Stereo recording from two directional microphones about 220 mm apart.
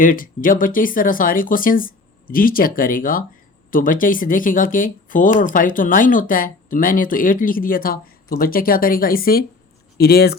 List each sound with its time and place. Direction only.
0.0 s speech: 40° left (ahead or behind)